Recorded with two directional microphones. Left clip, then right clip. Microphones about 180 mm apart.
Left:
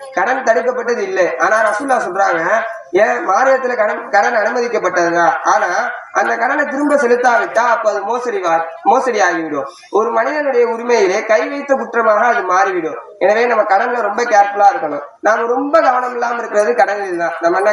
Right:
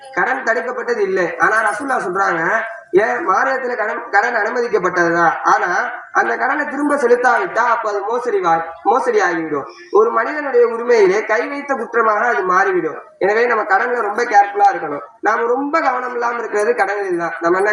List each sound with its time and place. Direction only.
0.2 s a man's voice: 35° left (ahead or behind)